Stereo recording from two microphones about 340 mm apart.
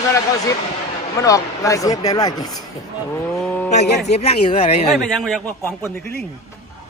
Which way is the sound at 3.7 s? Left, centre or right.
Centre.